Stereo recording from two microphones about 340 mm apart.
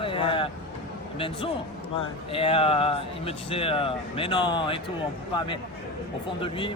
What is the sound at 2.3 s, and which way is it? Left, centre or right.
Speech, centre.